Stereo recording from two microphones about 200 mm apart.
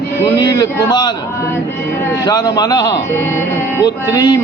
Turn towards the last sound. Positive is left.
turn(degrees=20)  # may be behind; listen again after turning